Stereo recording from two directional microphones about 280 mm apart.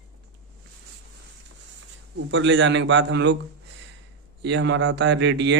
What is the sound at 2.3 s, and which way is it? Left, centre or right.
Speech, right.